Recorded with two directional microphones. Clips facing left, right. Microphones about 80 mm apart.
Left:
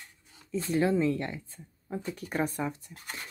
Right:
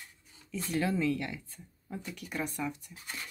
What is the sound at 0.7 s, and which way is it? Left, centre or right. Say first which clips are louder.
Speech: left 4 dB; left.